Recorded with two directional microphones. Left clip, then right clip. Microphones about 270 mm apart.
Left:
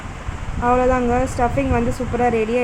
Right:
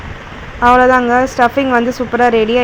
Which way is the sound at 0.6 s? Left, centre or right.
Centre.